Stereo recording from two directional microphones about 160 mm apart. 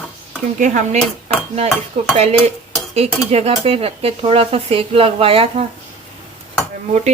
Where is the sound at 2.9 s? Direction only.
40° right (ahead or behind).